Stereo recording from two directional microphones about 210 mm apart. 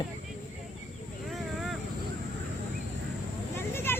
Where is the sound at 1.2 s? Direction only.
Centre (ahead or behind).